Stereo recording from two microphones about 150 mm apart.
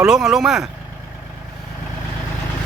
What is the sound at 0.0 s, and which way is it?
Speech, 5° right (ahead or behind).